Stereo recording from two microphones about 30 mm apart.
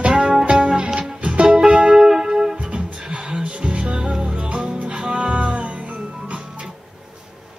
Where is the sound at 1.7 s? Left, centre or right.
Right.